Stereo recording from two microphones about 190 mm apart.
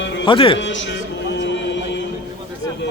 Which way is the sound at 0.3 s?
25° left (ahead or behind).